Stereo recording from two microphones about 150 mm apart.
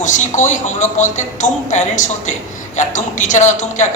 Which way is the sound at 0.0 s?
55° left (ahead or behind).